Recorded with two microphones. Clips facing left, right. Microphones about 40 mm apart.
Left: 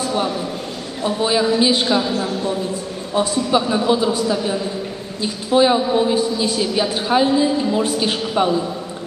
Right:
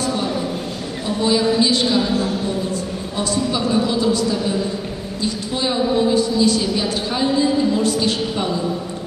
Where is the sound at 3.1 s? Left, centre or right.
Centre.